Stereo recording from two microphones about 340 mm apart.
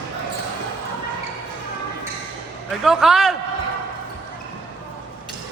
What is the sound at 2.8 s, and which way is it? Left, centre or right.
Speech, centre.